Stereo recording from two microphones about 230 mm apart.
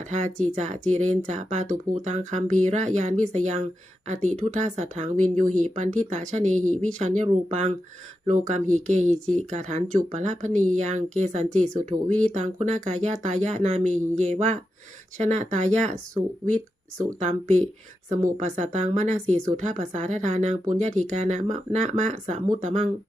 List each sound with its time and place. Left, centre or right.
0.0 s speech: right
17.2 s speech: right